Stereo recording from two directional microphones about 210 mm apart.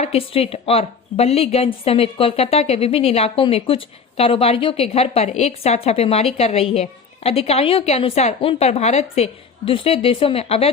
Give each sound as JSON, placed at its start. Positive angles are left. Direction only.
{"t": 0.0, "sound": "a woman's voice", "side_deg": 30}